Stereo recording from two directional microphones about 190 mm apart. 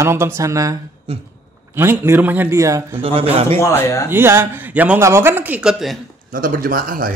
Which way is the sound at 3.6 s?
15° left (ahead or behind).